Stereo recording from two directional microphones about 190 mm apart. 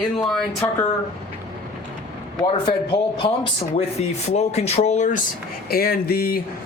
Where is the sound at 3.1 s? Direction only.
25° left (ahead or behind).